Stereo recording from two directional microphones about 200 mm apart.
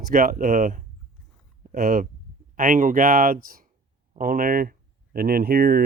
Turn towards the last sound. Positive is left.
turn(degrees=-50)  # may be behind; listen again after turning